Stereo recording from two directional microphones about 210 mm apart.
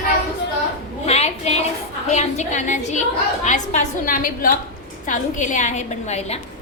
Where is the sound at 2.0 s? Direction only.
35° left (ahead or behind).